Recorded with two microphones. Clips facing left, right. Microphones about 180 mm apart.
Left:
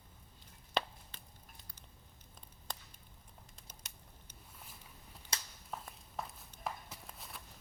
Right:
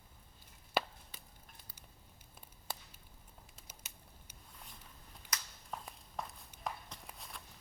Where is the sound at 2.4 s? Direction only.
5° right (ahead or behind).